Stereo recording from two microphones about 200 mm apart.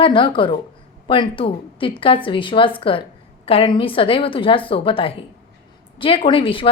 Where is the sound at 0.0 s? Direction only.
25° left (ahead or behind).